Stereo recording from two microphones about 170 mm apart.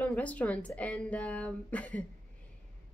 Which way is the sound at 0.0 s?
5° left (ahead or behind).